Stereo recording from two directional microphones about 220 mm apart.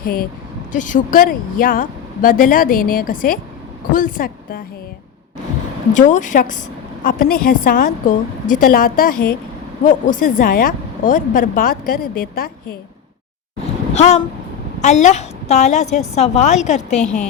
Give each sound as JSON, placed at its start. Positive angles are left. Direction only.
{"t": 0.0, "sound": "a woman's voice", "side_deg": 40}
{"t": 5.9, "sound": "a woman's voice", "side_deg": 35}
{"t": 13.9, "sound": "a woman's voice", "side_deg": 30}
{"t": 17.0, "sound": "a woman's voice", "side_deg": 5}